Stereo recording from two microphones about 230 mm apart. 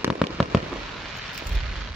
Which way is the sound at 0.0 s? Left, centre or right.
Centre.